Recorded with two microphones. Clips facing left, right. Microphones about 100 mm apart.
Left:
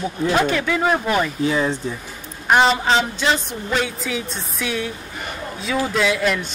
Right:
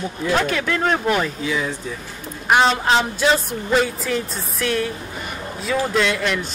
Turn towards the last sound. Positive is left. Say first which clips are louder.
# left 2 dB
turn(degrees=0)  # may be behind; listen again after turning